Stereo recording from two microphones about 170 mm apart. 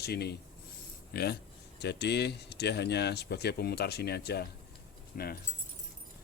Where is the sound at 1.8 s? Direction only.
80° left; by 5.4 s 65° left (ahead or behind).